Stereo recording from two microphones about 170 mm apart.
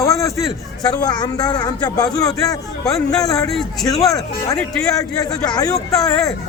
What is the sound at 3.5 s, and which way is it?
Speech, centre (ahead or behind).